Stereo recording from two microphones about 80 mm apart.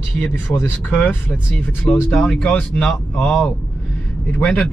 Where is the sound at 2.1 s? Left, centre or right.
Centre.